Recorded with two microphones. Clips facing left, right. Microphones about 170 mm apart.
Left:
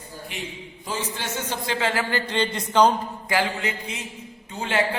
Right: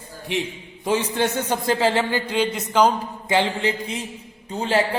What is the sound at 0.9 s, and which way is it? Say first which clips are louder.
Speech: right 9 dB; 60° right (ahead or behind).